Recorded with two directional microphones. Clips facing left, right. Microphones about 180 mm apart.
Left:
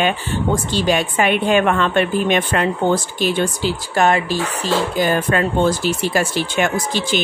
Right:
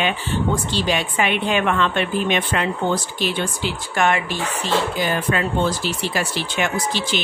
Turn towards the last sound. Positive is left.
turn(degrees=50)  # may be behind; listen again after turning